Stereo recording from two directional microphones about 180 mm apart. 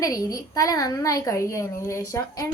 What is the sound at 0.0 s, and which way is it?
A woman's voice, 20° left (ahead or behind).